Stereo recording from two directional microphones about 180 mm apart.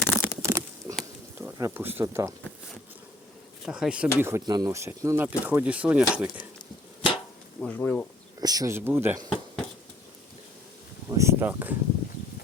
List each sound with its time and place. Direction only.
0.0 s a sound: 15° left (ahead or behind)
0.4 s a sound: 15° right (ahead or behind)
1.4 s speech: 15° right (ahead or behind)
3.7 s speech: 5° right (ahead or behind)
7.6 s speech: 10° left (ahead or behind)
8.4 s speech: 20° right (ahead or behind)
11.1 s speech: 15° right (ahead or behind)